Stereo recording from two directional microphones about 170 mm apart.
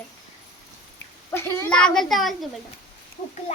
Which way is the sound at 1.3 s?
10° left (ahead or behind).